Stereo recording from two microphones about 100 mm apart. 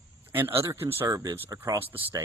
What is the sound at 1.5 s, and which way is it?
Speech, 25° right (ahead or behind).